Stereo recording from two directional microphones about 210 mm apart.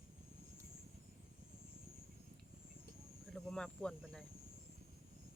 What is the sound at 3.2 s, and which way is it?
Speech, centre (ahead or behind).